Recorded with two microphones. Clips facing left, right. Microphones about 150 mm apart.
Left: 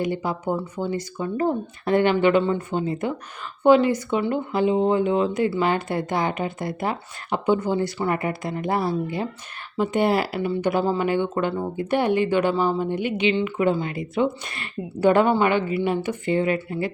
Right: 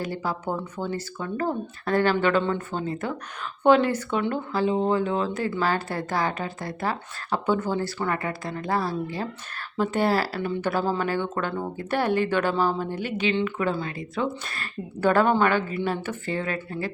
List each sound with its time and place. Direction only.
0.0 s speech: 15° left (ahead or behind)